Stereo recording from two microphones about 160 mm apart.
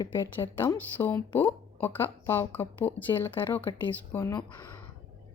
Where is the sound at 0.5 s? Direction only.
15° left (ahead or behind).